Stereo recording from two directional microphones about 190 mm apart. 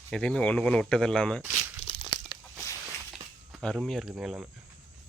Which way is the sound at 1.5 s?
35° left (ahead or behind).